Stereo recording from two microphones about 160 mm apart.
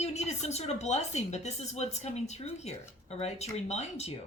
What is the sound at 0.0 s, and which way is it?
A woman's voice, 45° left (ahead or behind).